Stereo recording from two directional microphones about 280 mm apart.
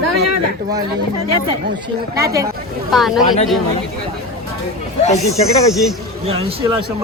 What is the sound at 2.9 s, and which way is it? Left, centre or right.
Speech, centre.